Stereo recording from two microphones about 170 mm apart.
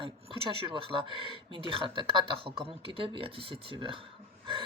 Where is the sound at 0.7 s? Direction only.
30° right (ahead or behind).